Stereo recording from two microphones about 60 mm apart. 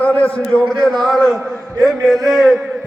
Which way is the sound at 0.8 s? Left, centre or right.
Centre.